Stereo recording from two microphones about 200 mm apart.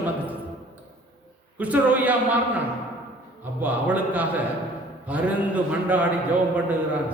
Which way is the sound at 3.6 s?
10° right (ahead or behind).